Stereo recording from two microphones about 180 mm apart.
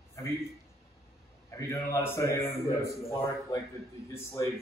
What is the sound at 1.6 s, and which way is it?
A man's voice, 15° left (ahead or behind).